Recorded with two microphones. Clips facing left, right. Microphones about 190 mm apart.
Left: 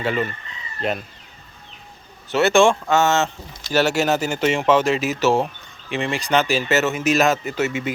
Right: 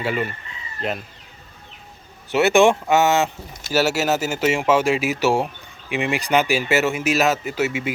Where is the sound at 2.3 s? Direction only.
15° right (ahead or behind).